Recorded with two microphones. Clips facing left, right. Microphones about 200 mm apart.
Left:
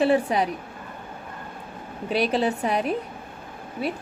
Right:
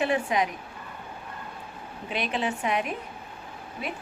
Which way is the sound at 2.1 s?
35° left (ahead or behind).